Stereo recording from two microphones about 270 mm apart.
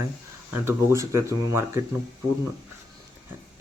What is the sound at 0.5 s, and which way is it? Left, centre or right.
Speech, centre.